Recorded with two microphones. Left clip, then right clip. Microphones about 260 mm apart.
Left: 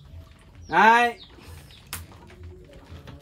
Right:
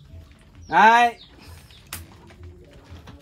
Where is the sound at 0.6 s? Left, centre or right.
Centre.